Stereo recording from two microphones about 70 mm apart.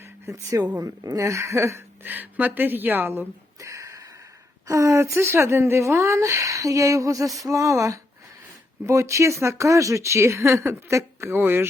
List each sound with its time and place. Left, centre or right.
0.3 s speech: right
0.8 s a woman's voice: right
1.2 s speech: right
2.0 s speech: right
3.6 s sniff: right
4.7 s speech: right